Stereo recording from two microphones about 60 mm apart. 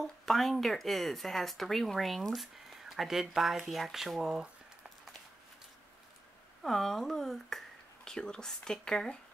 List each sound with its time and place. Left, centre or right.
0.0 s speech: centre
6.6 s speech: centre